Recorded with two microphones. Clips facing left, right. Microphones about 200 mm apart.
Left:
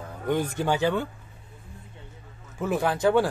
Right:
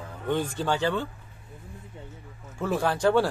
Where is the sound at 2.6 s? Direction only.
15° left (ahead or behind).